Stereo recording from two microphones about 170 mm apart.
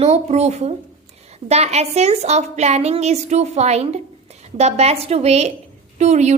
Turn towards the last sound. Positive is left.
turn(degrees=-40)  # may be behind; listen again after turning